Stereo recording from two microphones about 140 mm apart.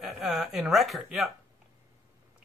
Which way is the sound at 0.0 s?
Centre (ahead or behind).